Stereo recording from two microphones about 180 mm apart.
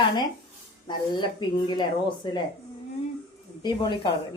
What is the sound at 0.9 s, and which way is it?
A woman's voice, 25° left (ahead or behind).